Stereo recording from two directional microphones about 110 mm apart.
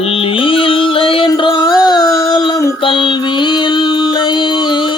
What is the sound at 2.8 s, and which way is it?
Mantra, 50° left (ahead or behind).